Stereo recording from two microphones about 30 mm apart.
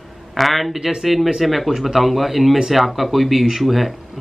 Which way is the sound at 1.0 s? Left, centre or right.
Centre.